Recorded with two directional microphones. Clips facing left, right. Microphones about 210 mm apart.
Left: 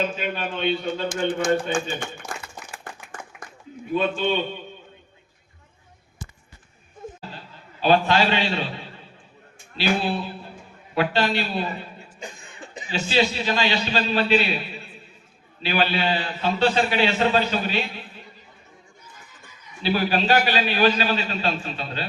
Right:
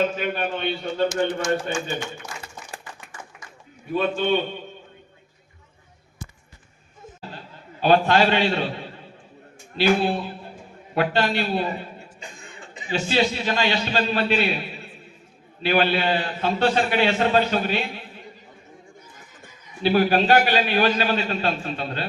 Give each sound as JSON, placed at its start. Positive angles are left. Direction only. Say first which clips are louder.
{"t": 0.2, "sound": "a man's voice", "louder": "right 1 dB", "side_deg": -50}
{"t": 1.0, "sound": "speech", "louder": "right 2 dB", "side_deg": 55}
{"t": 2.3, "sound": "a sound", "louder": "left 1 dB", "side_deg": 55}
{"t": 7.8, "sound": "a man's voice", "louder": "right 1 dB", "side_deg": -50}
{"t": 9.7, "sound": "a man's voice", "louder": "right 3 dB", "side_deg": -50}
{"t": 12.9, "sound": "a man's voice", "louder": "right 1 dB", "side_deg": -50}
{"t": 19.5, "sound": "a man's voice", "louder": "right 3 dB", "side_deg": -50}